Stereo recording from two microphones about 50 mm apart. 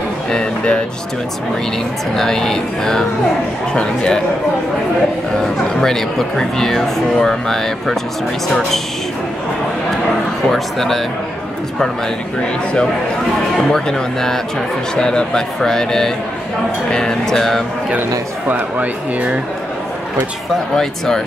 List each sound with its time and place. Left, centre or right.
0.3 s speech: centre
2.1 s speech: centre
5.4 s speech: centre
10.5 s speech: centre
13.6 s speech: centre
20.7 s speech: centre